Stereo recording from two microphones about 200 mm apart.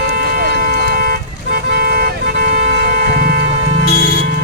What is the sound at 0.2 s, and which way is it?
Vehicle, 50° right (ahead or behind).